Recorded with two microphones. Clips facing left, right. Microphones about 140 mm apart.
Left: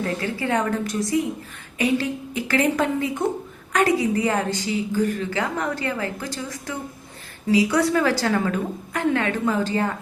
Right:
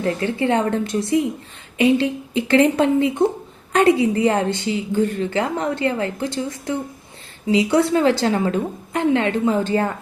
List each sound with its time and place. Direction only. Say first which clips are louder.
0.0 s a woman's voice: right 5 dB; 25° right (ahead or behind)